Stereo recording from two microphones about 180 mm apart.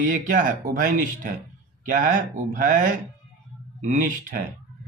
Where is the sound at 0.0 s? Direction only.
45° right (ahead or behind).